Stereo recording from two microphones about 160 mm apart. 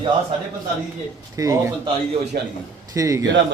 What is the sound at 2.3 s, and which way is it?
Speech, 65° right (ahead or behind).